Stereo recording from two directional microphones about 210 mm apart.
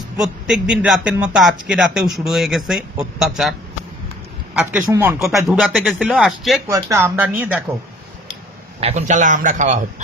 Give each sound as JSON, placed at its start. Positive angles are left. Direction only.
{"t": 0.2, "sound": "speech", "side_deg": 0}
{"t": 4.9, "sound": "speech", "side_deg": -10}
{"t": 5.6, "sound": "speech", "side_deg": 0}
{"t": 6.7, "sound": "speech", "side_deg": -15}
{"t": 8.8, "sound": "a man's voice", "side_deg": -35}